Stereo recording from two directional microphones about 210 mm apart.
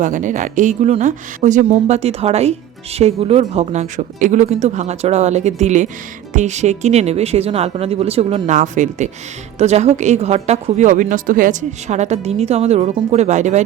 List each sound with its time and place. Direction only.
0.0 s a woman's voice: 35° right (ahead or behind)